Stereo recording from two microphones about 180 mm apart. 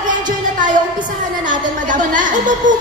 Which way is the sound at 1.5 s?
45° right (ahead or behind).